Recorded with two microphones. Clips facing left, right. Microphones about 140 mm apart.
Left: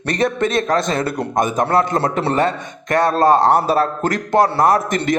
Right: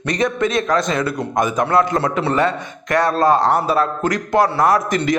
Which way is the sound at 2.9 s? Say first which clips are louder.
Left 1 dB; 25° left (ahead or behind).